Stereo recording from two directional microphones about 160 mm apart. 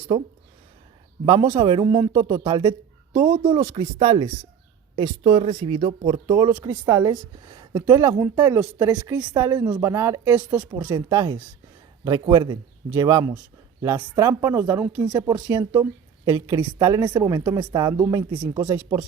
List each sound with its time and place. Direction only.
0.1 s speech: 30° right (ahead or behind)
6.5 s speech: 10° right (ahead or behind); by 7.9 s 30° right (ahead or behind)
7.9 s speech: 15° right (ahead or behind)
12.0 s speech: 30° right (ahead or behind)